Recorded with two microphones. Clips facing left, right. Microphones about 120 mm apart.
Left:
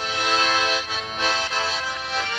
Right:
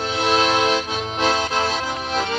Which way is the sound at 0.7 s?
40° right (ahead or behind).